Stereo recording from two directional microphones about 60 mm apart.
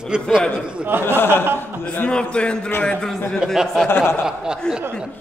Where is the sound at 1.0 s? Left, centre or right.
Left.